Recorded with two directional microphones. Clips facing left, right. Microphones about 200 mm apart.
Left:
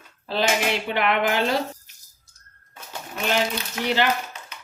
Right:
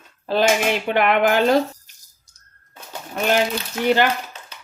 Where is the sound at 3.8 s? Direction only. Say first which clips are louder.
Right 6 dB; 50° right (ahead or behind).